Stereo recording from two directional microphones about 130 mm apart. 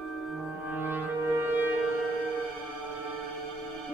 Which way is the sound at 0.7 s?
15° right (ahead or behind).